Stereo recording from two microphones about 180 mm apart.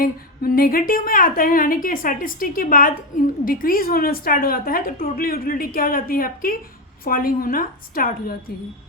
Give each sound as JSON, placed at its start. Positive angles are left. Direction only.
{"t": 0.0, "sound": "a woman's voice", "side_deg": 55}